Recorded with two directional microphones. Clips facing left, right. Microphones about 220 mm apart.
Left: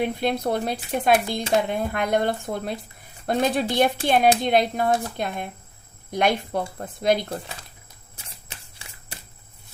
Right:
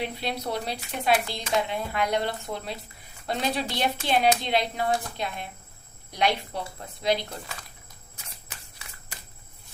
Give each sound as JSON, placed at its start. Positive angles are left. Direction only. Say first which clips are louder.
{"t": 0.0, "sound": "speech", "louder": "left 7 dB", "side_deg": 50}
{"t": 8.1, "sound": "shuffling cards", "louder": "left 2 dB", "side_deg": 25}